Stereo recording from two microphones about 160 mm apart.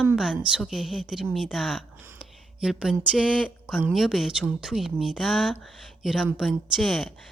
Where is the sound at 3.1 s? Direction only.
5° right (ahead or behind).